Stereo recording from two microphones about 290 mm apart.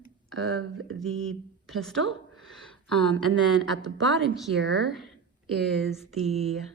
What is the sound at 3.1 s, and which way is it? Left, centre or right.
Speech, right.